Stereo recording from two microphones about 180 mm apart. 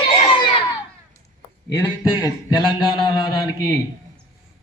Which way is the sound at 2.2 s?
25° left (ahead or behind).